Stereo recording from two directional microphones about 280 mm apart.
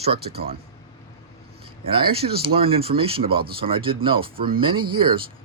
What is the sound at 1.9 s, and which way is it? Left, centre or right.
Speech, centre.